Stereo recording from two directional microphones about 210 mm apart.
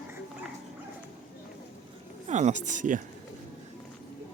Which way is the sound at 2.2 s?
35° right (ahead or behind).